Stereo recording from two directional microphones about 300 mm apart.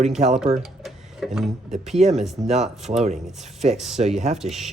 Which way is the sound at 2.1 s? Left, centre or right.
Centre.